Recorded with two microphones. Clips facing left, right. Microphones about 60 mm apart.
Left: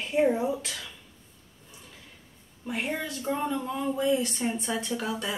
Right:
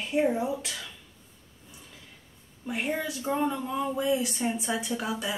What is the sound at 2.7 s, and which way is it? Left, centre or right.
Speech, centre.